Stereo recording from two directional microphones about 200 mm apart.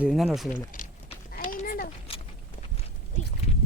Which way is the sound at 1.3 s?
45° left (ahead or behind).